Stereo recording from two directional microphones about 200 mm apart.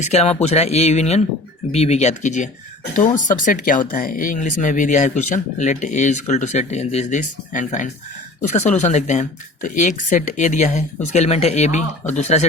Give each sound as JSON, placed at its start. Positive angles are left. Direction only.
{"t": 0.0, "sound": "speech", "side_deg": 35}